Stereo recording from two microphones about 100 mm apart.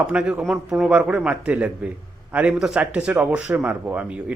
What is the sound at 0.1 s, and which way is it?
A man's voice, 10° right (ahead or behind).